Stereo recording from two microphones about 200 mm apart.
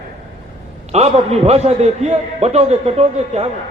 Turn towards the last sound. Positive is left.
turn(degrees=-30)  # may be behind; listen again after turning